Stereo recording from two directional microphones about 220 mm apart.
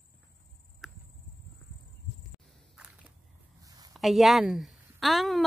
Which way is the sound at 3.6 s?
15° right (ahead or behind).